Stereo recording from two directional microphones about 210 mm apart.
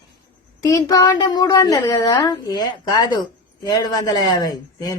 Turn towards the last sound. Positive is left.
turn(degrees=20)  # may be behind; listen again after turning